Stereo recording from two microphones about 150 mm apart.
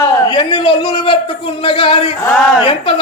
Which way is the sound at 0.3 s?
35° left (ahead or behind).